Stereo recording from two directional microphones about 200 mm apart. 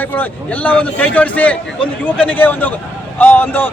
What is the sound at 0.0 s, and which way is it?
A man's voice, 10° left (ahead or behind).